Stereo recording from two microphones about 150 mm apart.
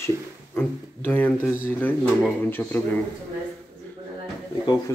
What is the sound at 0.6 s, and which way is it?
Speech, 10° left (ahead or behind).